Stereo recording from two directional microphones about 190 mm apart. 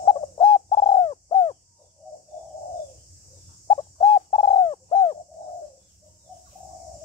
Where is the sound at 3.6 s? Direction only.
25° left (ahead or behind).